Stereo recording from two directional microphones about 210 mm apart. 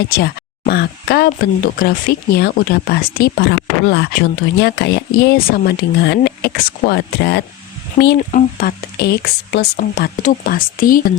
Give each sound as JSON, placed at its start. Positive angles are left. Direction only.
{"t": 0.1, "sound": "speech", "side_deg": 45}
{"t": 7.9, "sound": "speech", "side_deg": 40}